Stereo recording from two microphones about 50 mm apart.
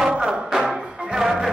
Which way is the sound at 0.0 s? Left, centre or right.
Centre.